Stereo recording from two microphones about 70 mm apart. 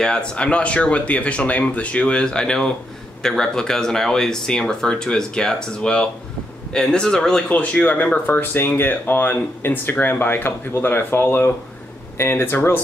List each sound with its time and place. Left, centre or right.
0.0 s speech: centre
7.4 s speech: left